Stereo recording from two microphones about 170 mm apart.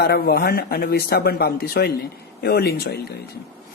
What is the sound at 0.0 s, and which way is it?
Speech, 70° left (ahead or behind).